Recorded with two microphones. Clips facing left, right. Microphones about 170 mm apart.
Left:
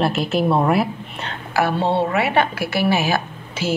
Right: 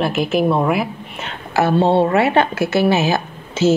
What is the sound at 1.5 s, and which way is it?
A woman's voice, 25° right (ahead or behind).